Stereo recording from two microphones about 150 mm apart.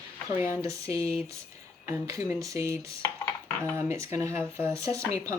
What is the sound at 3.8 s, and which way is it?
Speech, 15° right (ahead or behind).